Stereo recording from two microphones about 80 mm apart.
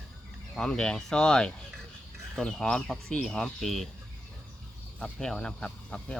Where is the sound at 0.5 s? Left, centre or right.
Centre.